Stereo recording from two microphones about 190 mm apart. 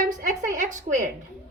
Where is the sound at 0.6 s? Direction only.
40° right (ahead or behind).